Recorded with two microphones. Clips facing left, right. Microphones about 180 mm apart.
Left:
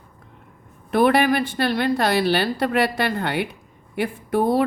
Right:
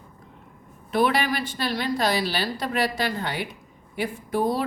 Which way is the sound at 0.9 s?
55° left (ahead or behind).